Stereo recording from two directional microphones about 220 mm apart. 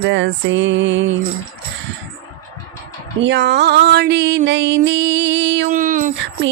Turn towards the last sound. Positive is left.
turn(degrees=-40)  # may be behind; listen again after turning